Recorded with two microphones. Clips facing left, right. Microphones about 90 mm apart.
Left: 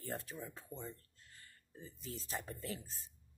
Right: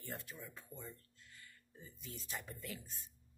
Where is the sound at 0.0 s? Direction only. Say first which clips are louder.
Left 5 dB; 35° left (ahead or behind).